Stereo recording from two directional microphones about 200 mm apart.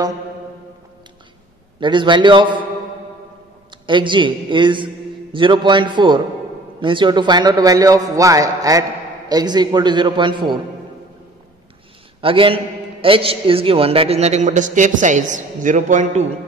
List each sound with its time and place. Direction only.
1.8 s a man's voice: 25° right (ahead or behind)
3.8 s a man's voice: 25° right (ahead or behind)
12.2 s a man's voice: 25° right (ahead or behind)